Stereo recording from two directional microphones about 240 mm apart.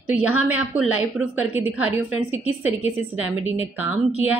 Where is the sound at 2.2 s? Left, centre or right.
Right.